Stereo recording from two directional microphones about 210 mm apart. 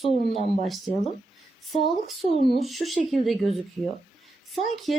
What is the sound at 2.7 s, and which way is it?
Speech, centre (ahead or behind).